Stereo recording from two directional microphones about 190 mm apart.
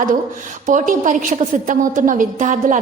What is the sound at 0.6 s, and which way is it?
A woman's voice, 40° right (ahead or behind).